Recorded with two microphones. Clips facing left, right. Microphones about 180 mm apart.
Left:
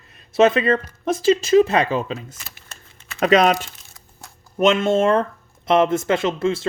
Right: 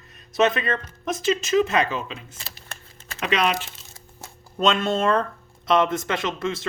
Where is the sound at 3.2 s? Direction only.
40° left (ahead or behind).